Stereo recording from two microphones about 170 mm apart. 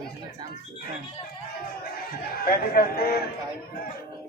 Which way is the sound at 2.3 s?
60° left (ahead or behind).